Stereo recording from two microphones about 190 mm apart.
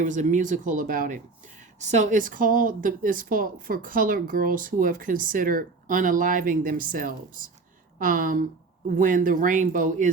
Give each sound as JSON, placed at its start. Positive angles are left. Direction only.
{"t": 0.0, "sound": "a woman's voice", "side_deg": -40}